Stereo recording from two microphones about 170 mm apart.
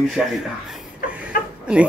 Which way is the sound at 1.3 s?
60° left (ahead or behind).